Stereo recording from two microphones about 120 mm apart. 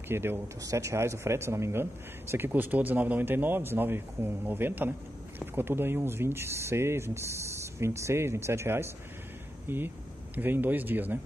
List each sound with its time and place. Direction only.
0.1 s speech: 20° right (ahead or behind)